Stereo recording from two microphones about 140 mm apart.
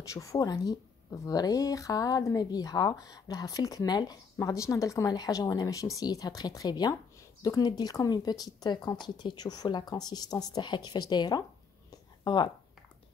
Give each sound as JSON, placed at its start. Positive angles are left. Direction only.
{"t": 0.0, "sound": "speech", "side_deg": 25}